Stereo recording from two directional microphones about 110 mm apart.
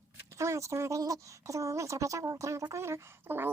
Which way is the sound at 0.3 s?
25° right (ahead or behind).